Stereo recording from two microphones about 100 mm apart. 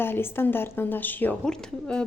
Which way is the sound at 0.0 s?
20° left (ahead or behind).